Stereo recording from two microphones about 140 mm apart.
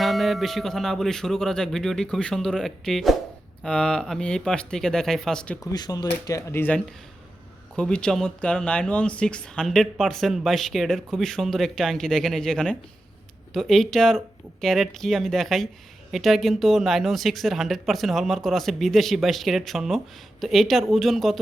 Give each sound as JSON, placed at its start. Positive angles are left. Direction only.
{"t": 0.0, "sound": "speech", "side_deg": 0}
{"t": 5.7, "sound": "speech", "side_deg": 30}